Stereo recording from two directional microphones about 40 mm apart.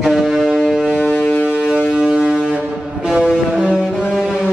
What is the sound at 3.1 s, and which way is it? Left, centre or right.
Music, centre.